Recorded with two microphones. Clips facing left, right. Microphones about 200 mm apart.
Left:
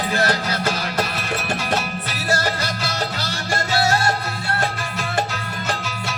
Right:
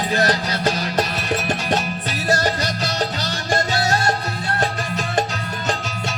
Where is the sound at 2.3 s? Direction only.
20° right (ahead or behind).